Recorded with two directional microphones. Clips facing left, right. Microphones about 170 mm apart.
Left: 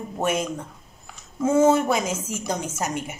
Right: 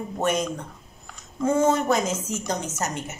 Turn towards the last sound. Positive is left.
turn(degrees=10)  # may be behind; listen again after turning